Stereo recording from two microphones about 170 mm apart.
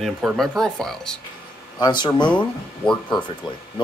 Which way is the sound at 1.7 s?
25° left (ahead or behind).